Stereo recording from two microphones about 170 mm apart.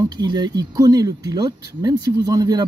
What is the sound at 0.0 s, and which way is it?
Speech, 25° right (ahead or behind).